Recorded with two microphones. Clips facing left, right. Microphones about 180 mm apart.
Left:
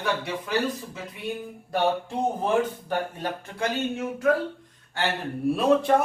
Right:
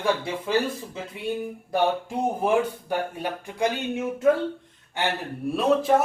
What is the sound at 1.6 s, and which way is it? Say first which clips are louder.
Speech: even; 10° right (ahead or behind).